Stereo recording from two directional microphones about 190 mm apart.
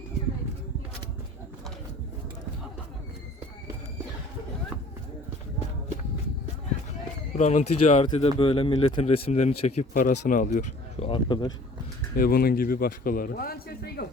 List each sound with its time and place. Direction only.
7.3 s speech: 35° left (ahead or behind)
12.1 s a man's voice: 50° left (ahead or behind)